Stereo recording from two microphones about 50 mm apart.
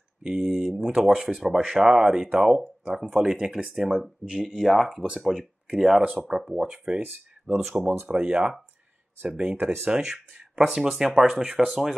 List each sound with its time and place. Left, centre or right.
0.2 s speech: centre
9.8 s speech: centre